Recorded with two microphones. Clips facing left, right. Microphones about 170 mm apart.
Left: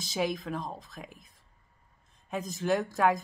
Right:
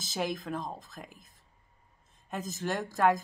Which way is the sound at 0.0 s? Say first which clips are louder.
Left 2 dB; centre (ahead or behind).